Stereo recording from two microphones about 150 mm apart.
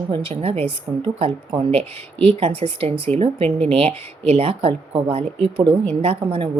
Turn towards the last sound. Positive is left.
turn(degrees=-40)  # may be behind; listen again after turning